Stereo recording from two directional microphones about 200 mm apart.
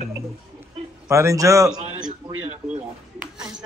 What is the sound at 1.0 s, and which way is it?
Speech, 15° right (ahead or behind).